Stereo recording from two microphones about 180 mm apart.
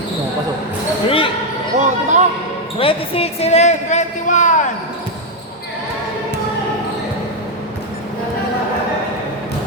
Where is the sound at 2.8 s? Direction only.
30° left (ahead or behind).